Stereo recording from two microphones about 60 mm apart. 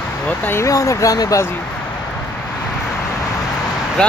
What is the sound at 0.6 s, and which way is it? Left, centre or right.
Speech, left.